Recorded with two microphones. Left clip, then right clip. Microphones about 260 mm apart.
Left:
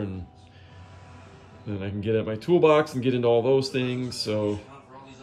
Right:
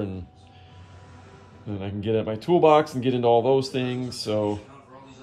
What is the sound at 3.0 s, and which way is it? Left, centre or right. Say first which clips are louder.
Speech: right 2 dB; left.